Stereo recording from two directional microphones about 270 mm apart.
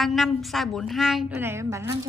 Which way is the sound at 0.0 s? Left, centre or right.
Centre.